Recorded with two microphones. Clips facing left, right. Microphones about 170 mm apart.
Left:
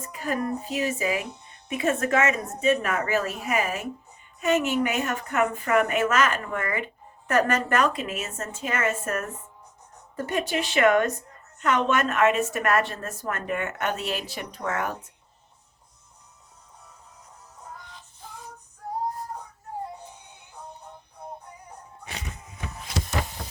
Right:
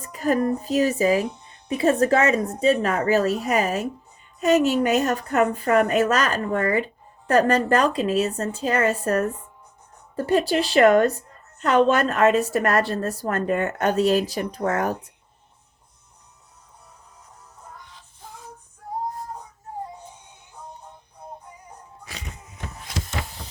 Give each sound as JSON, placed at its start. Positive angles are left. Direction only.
{"t": 0.0, "sound": "a woman's voice", "side_deg": -40}